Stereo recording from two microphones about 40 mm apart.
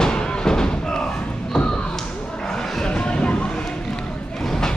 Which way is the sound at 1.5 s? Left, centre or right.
Left.